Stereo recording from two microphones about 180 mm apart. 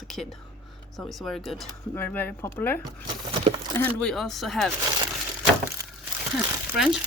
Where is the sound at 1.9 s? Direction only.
10° left (ahead or behind).